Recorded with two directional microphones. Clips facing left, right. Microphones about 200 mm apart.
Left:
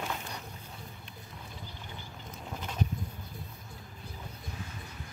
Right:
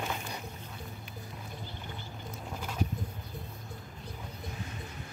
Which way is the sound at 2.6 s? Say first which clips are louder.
Even; 10° right (ahead or behind).